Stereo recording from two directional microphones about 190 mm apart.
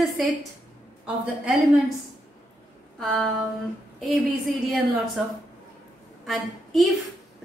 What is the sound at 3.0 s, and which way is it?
A woman's voice, centre (ahead or behind).